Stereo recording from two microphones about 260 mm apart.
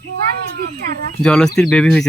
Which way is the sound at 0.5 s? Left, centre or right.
Right.